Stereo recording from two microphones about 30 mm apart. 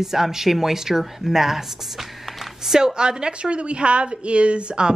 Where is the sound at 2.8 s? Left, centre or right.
Right.